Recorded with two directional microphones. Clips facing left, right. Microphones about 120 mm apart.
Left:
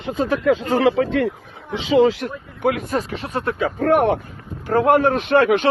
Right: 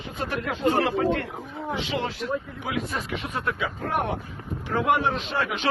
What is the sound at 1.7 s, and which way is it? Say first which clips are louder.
Speech: left 13 dB; 80° left.